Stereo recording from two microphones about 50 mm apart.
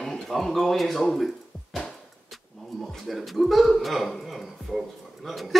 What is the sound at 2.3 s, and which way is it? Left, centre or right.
Speech, centre.